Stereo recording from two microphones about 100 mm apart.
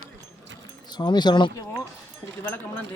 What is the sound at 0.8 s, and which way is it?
Speech, 45° left (ahead or behind).